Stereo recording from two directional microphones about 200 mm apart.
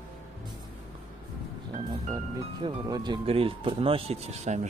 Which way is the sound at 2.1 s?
20° right (ahead or behind).